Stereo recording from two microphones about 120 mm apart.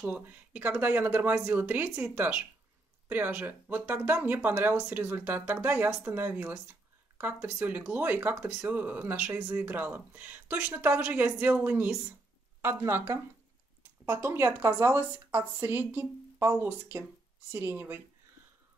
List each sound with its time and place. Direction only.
0.0 s speech: 15° right (ahead or behind)